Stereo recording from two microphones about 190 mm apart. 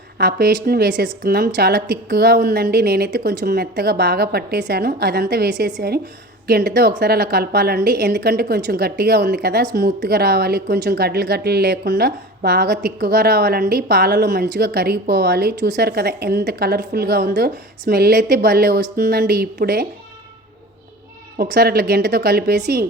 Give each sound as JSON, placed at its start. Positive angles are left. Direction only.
{"t": 0.2, "sound": "a woman's voice", "side_deg": -55}
{"t": 21.3, "sound": "a woman's voice", "side_deg": -60}